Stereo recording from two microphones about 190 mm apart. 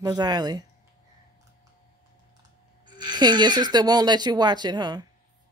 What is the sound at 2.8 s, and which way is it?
Speech, 25° right (ahead or behind).